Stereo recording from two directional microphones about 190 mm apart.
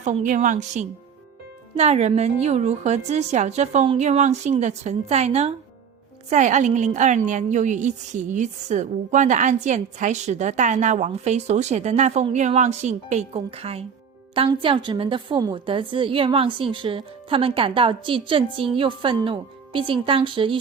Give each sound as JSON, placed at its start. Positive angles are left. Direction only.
{"t": 0.0, "sound": "a woman's voice", "side_deg": -40}